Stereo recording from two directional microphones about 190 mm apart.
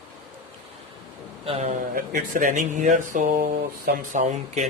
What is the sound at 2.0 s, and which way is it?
Speech, 45° right (ahead or behind).